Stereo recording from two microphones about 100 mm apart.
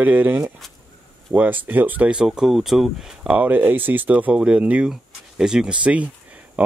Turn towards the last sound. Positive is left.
turn(degrees=-15)  # may be behind; listen again after turning